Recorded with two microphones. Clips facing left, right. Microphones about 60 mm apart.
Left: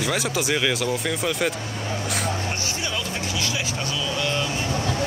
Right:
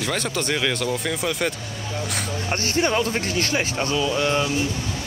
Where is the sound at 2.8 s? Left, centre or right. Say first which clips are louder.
Right 7 dB; right.